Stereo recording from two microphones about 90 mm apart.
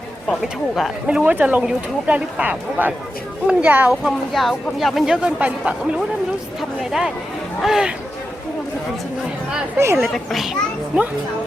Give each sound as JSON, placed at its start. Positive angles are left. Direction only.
{"t": 0.4, "sound": "speech", "side_deg": -10}
{"t": 4.0, "sound": "speech", "side_deg": 0}
{"t": 6.6, "sound": "speech", "side_deg": -5}
{"t": 9.7, "sound": "speech", "side_deg": -30}
{"t": 10.0, "sound": "speech", "side_deg": 0}